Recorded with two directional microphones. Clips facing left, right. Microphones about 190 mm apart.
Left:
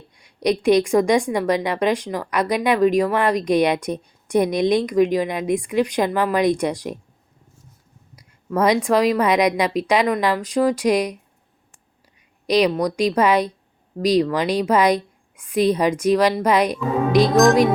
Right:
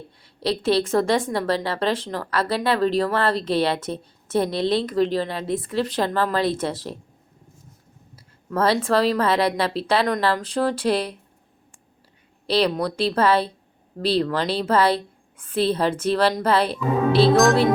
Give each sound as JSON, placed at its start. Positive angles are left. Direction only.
{"t": 0.2, "sound": "a woman's voice", "side_deg": 15}
{"t": 8.1, "sound": "a woman's voice", "side_deg": 15}
{"t": 12.5, "sound": "a woman's voice", "side_deg": 15}